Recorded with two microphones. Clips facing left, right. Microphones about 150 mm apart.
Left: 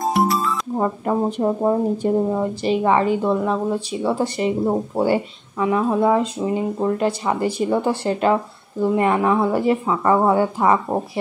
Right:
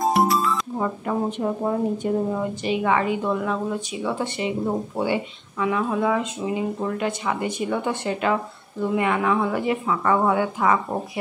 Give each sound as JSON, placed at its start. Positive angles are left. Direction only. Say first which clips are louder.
{"t": 0.0, "sound": "music", "louder": "even", "side_deg": 0}
{"t": 0.7, "sound": "speech", "louder": "left 4 dB", "side_deg": 35}